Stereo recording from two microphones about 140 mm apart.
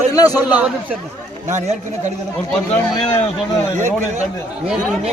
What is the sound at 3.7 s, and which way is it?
Speech, 60° right (ahead or behind).